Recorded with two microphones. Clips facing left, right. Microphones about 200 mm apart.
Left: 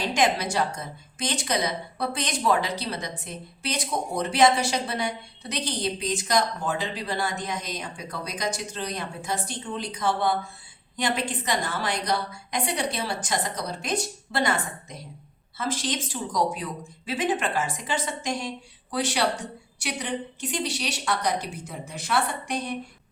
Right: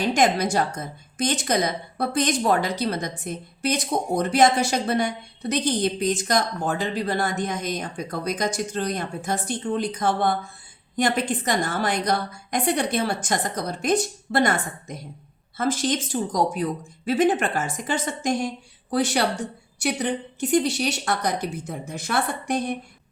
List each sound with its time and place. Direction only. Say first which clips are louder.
0.1 s a woman's voice: right 4 dB; 45° right (ahead or behind)